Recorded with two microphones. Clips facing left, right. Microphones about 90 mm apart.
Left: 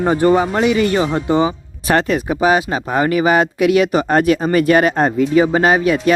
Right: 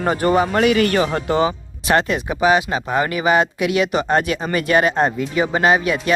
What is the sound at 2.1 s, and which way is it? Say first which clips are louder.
Speech: left 2 dB; 35° left (ahead or behind).